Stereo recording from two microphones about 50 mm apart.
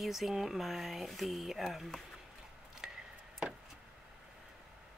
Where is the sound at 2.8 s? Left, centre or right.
Centre.